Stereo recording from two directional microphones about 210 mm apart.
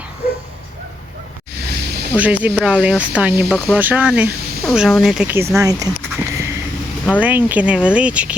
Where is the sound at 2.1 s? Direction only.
5° right (ahead or behind).